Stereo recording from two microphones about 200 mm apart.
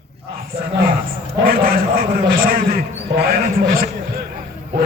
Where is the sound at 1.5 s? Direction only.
45° right (ahead or behind).